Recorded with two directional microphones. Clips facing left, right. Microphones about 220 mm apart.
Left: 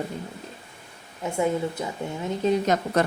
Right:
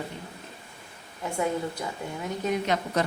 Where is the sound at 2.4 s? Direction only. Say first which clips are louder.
Left 6 dB; 30° left (ahead or behind).